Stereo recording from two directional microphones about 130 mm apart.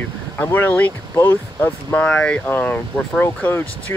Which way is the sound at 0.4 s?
15° left (ahead or behind).